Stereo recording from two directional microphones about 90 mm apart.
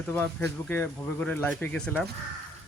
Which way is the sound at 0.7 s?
20° left (ahead or behind).